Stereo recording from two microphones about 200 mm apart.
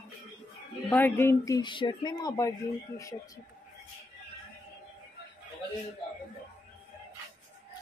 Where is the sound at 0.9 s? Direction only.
10° left (ahead or behind).